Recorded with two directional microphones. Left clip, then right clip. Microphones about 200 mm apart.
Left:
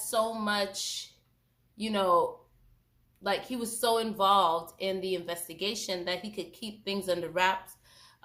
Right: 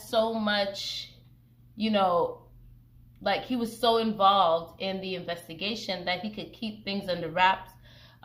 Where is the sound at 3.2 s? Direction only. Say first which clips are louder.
Right 3 dB; 15° left (ahead or behind).